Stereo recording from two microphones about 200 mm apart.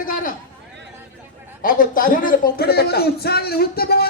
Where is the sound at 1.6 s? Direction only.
45° left (ahead or behind).